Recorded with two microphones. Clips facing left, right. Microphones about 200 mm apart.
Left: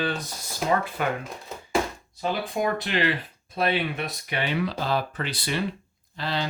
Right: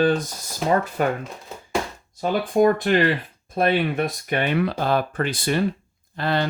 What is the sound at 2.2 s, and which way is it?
Speech, 45° right (ahead or behind).